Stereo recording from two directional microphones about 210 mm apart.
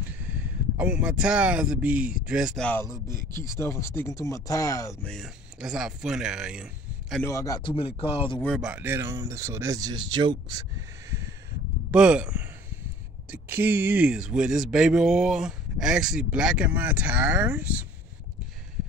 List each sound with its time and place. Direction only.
0.7 s speech: 5° right (ahead or behind)
3.2 s speech: 40° left (ahead or behind)
3.4 s speech: 15° left (ahead or behind)
5.1 s speech: centre (ahead or behind)
7.2 s speech: 15° left (ahead or behind)
8.4 s speech: centre (ahead or behind); by 10.6 s 20° right (ahead or behind)
11.1 s a sound: 15° right (ahead or behind)
11.9 s speech: 5° right (ahead or behind)